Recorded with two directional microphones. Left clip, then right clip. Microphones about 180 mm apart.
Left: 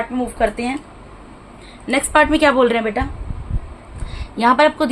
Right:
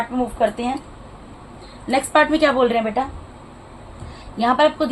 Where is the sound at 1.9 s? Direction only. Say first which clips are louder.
Left 2 dB; 30° left (ahead or behind).